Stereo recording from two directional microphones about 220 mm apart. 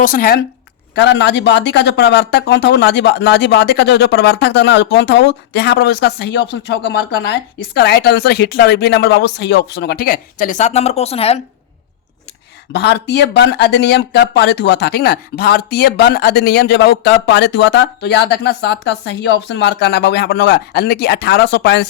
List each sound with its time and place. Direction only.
0.0 s speech: 40° left (ahead or behind)
0.9 s speech: 50° left (ahead or behind); by 11.3 s 25° left (ahead or behind)
12.7 s speech: 50° left (ahead or behind)